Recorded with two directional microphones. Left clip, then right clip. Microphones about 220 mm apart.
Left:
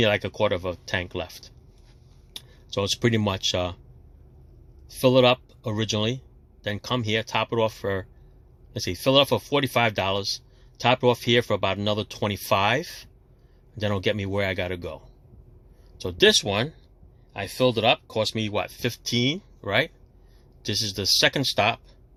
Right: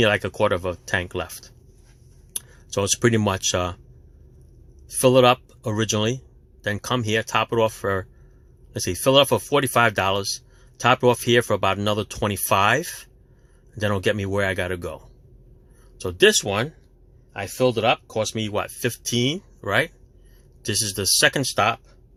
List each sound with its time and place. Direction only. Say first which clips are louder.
0.0 s speech: right 3 dB; 15° right (ahead or behind)
4.9 s speech: right 3 dB; 20° right (ahead or behind)